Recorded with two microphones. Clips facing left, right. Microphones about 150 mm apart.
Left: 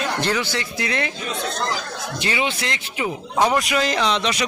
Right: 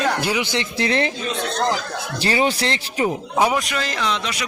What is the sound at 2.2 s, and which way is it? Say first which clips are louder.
Speech: right 5 dB; 35° right (ahead or behind).